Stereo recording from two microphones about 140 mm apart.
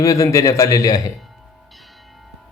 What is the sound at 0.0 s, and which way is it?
A man's voice, 25° left (ahead or behind).